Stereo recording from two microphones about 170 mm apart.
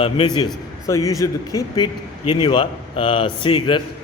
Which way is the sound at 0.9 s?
20° left (ahead or behind).